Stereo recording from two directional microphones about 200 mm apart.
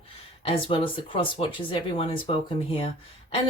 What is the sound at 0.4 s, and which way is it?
Speech, 25° left (ahead or behind).